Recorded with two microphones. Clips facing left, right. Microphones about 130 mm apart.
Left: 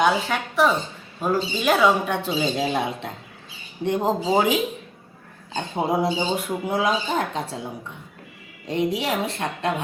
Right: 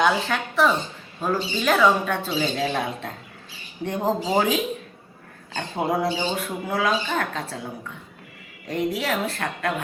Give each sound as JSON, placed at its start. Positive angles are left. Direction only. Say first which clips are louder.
{"t": 0.0, "sound": "speech", "louder": "left 1 dB", "side_deg": 0}
{"t": 1.6, "sound": "a woman's voice", "louder": "even", "side_deg": 20}
{"t": 8.6, "sound": "speech", "louder": "left 2 dB", "side_deg": 20}